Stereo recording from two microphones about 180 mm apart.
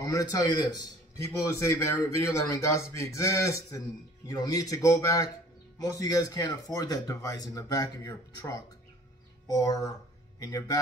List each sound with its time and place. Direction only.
0.0 s a man's voice: 20° left (ahead or behind)